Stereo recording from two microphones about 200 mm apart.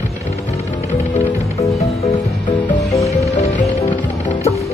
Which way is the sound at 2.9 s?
35° left (ahead or behind).